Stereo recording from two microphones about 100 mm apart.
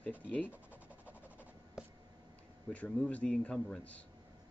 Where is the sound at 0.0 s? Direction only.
15° left (ahead or behind).